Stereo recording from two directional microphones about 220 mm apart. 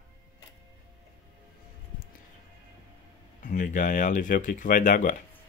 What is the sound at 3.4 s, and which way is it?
Speech, 35° left (ahead or behind).